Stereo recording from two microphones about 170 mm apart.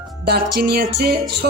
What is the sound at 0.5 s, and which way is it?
Speech, 65° right (ahead or behind).